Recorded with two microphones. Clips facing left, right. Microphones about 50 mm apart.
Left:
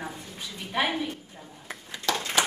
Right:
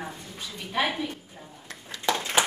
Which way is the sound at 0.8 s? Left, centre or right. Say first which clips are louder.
Even; centre.